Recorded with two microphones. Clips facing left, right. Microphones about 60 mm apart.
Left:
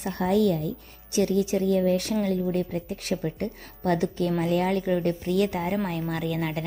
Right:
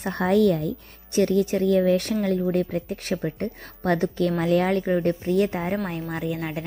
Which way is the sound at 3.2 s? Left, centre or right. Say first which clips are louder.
Right 2 dB; right.